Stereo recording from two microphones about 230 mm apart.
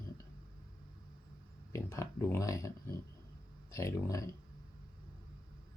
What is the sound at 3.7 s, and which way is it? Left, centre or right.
Speech, centre.